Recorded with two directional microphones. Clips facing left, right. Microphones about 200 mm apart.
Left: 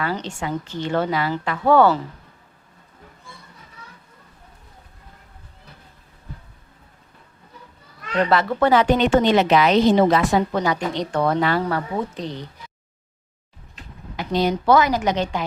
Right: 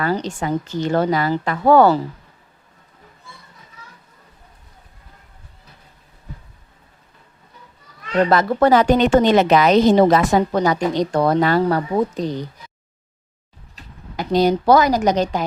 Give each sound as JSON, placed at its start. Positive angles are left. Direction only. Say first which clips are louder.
{"t": 0.0, "sound": "speech", "louder": "right 4 dB", "side_deg": -40}
{"t": 8.3, "sound": "a woman's voice", "louder": "right 2 dB", "side_deg": -40}
{"t": 14.2, "sound": "speech", "louder": "right 5 dB", "side_deg": -40}